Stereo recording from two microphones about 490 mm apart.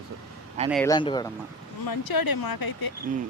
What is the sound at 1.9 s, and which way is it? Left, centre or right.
Speech, left.